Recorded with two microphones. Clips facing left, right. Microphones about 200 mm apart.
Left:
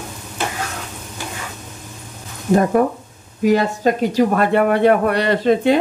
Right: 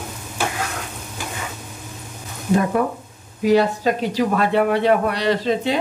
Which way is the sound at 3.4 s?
45° left (ahead or behind).